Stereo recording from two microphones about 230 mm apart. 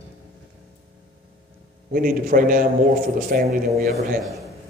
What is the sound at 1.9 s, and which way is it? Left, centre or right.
A man's voice, right.